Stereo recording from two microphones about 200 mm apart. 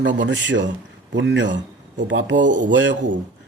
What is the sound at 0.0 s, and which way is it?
A man's voice, 65° right (ahead or behind).